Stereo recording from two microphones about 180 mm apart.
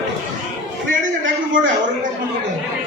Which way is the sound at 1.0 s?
45° right (ahead or behind).